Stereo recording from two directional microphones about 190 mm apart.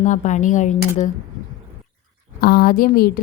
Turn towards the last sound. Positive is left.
turn(degrees=50)  # may be behind; listen again after turning